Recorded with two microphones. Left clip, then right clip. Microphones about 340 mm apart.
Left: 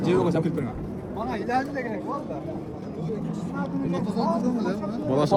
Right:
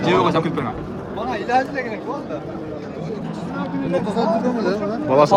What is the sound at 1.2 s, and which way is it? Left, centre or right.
Speech, left.